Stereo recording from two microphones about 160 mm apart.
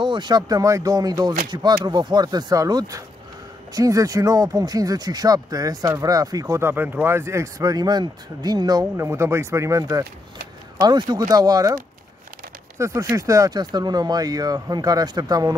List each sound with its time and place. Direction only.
0.0 s speech: 30° right (ahead or behind)